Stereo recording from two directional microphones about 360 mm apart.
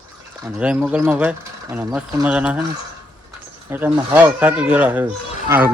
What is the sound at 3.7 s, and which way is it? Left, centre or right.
Speech, centre.